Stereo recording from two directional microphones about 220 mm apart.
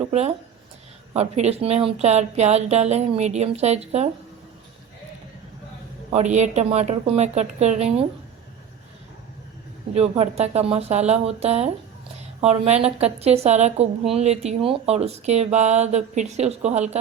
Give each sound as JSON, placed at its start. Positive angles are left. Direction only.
{"t": 0.0, "sound": "a woman's voice", "side_deg": -30}
{"t": 6.1, "sound": "speech", "side_deg": -30}
{"t": 9.9, "sound": "a woman's voice", "side_deg": -30}